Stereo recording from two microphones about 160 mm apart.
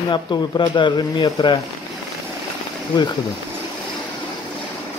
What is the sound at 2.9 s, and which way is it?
Speech, 25° left (ahead or behind).